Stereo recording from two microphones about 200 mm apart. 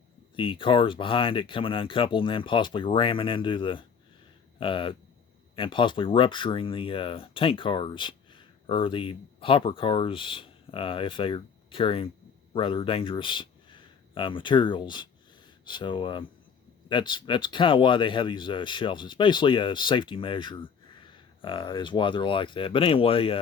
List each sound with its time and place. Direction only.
0.3 s speech: 25° left (ahead or behind)